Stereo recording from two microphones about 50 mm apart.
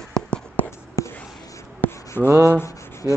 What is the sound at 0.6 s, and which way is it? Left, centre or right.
Whispering, left.